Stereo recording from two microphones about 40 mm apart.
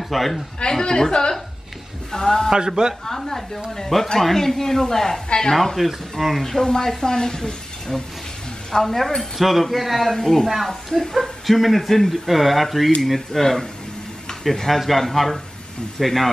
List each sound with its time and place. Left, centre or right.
0.1 s a man's voice: centre
0.6 s a man's voice: centre
2.5 s a man's voice: centre
3.1 s a woman's voice: centre
5.8 s a man's voice: centre
6.6 s a man's voice: centre
10.1 s a woman's voice: centre